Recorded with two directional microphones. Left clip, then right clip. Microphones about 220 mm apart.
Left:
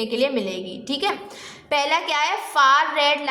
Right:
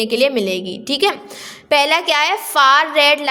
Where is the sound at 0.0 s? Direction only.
30° right (ahead or behind).